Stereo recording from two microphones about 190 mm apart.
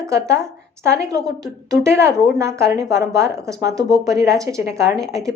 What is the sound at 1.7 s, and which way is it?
A woman's voice, 15° right (ahead or behind).